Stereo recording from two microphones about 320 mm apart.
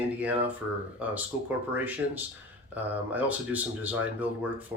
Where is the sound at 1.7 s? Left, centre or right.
Centre.